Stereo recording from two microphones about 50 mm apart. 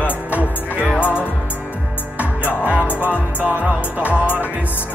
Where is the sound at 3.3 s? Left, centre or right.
Right.